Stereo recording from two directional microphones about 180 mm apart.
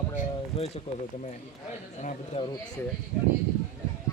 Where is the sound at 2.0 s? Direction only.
40° left (ahead or behind).